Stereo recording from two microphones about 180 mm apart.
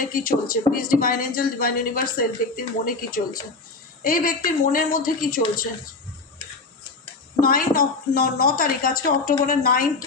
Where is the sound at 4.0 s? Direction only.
50° left (ahead or behind).